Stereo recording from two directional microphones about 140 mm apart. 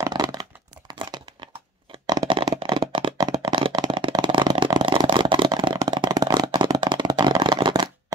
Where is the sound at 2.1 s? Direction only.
25° right (ahead or behind).